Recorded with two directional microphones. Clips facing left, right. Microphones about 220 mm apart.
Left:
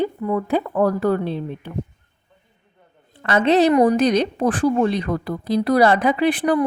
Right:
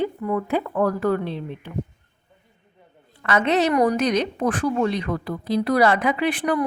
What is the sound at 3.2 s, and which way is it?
A woman's voice, 30° left (ahead or behind).